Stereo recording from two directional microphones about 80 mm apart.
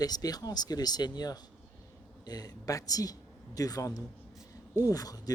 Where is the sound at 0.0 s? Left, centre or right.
Left.